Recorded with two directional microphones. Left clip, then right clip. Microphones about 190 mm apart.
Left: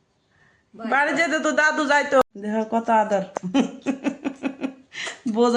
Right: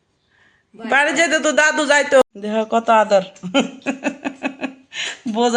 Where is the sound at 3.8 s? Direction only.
15° right (ahead or behind).